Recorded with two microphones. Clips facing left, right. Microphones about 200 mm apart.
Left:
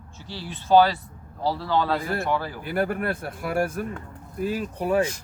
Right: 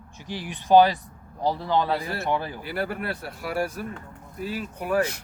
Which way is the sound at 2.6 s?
50° left (ahead or behind).